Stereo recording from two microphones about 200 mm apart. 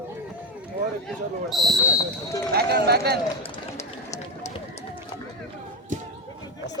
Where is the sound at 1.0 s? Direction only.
Centre (ahead or behind).